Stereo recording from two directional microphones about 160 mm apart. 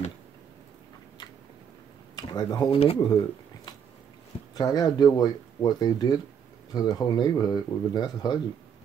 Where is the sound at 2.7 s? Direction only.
40° left (ahead or behind).